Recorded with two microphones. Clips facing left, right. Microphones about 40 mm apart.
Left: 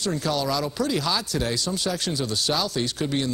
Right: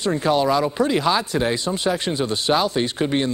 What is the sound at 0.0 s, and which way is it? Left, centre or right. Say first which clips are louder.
Speech: right 6 dB; right.